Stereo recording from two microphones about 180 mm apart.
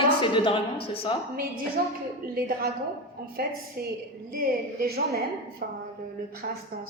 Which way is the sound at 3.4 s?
60° right (ahead or behind).